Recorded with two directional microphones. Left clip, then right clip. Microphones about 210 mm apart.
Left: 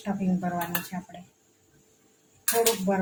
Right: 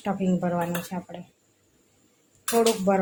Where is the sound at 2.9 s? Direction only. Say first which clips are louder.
Right 5 dB; 50° right (ahead or behind).